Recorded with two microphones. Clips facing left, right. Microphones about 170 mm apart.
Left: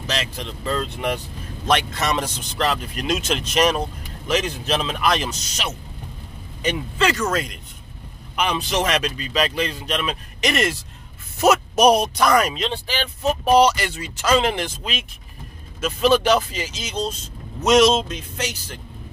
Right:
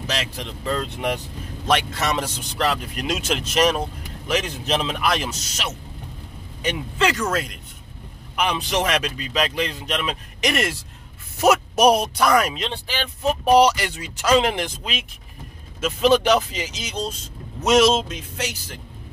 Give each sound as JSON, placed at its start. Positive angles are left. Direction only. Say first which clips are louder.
{"t": 0.0, "sound": "a man's voice", "louder": "left 1 dB", "side_deg": -10}
{"t": 7.2, "sound": "a man's voice", "louder": "left 1 dB", "side_deg": -5}